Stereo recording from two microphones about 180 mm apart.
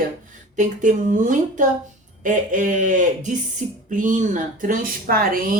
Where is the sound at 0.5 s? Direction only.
45° right (ahead or behind).